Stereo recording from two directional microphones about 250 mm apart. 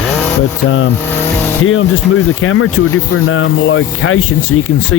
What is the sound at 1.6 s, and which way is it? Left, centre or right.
Speech, left.